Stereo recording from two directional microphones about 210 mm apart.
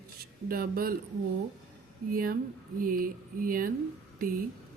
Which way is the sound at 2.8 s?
40° right (ahead or behind).